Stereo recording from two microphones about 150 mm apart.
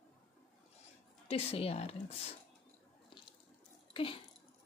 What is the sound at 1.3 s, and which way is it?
Speech, 40° left (ahead or behind).